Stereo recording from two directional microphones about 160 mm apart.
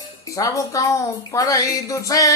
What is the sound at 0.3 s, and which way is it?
A woman's voice, 20° left (ahead or behind).